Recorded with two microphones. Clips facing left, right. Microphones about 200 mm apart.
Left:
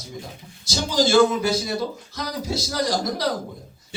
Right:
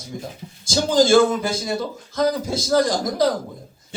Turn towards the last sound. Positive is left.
turn(degrees=-50)  # may be behind; listen again after turning